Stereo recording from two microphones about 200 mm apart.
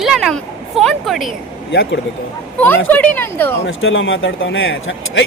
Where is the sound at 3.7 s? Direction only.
85° left.